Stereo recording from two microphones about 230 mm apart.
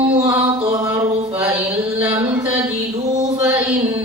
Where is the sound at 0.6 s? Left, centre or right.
Centre.